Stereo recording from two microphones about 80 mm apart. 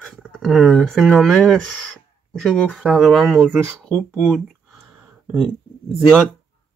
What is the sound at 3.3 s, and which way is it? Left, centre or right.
Speech, centre.